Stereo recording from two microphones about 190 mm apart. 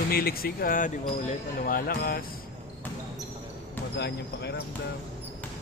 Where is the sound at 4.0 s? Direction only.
60° left (ahead or behind).